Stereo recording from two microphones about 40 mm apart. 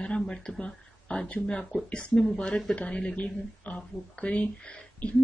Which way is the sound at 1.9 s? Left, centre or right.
Left.